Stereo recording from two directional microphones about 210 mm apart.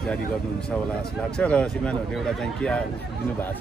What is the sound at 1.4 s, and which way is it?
Speech, 5° left (ahead or behind).